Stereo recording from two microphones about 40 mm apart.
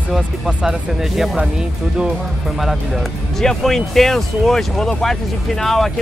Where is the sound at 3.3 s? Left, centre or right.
Centre.